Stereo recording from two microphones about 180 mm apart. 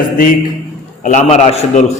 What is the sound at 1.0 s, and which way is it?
Speech, 40° left (ahead or behind).